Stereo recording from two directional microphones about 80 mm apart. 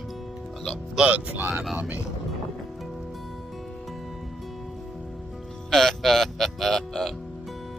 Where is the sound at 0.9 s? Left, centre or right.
Centre.